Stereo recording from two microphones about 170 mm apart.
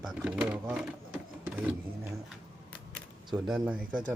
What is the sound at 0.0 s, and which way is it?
Speech, 5° right (ahead or behind).